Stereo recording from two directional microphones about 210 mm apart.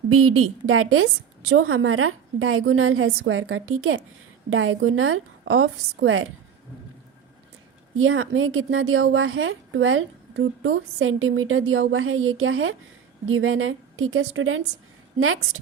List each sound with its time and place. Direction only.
0.1 s a woman's voice: 90° right; by 6.2 s 70° right (ahead or behind)
7.9 s a woman's voice: 70° right (ahead or behind)